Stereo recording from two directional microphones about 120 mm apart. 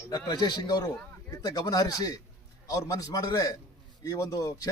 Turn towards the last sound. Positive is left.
turn(degrees=30)  # may be behind; listen again after turning